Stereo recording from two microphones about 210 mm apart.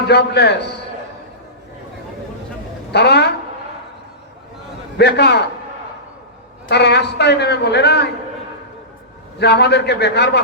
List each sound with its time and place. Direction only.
0.1 s a man's voice: 50° left (ahead or behind)
2.9 s a man's voice: 50° left (ahead or behind)
4.9 s a man's voice: 50° left (ahead or behind)
6.7 s a man's voice: 55° left (ahead or behind)
9.4 s a man's voice: 50° left (ahead or behind)